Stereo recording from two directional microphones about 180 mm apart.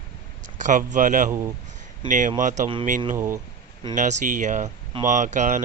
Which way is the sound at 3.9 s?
40° right (ahead or behind).